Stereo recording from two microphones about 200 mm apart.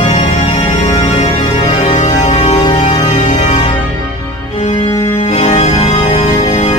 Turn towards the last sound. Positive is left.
turn(degrees=30)  # may be behind; listen again after turning